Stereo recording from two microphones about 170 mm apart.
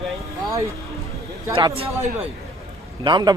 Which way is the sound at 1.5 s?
35° right (ahead or behind).